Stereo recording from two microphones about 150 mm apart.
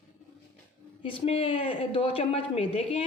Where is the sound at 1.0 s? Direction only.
35° left (ahead or behind).